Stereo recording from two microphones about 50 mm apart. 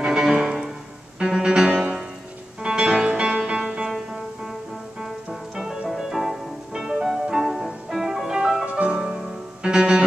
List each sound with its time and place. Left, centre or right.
0.0 s music: centre
5.6 s music: centre
8.6 s music: right
8.9 s music: centre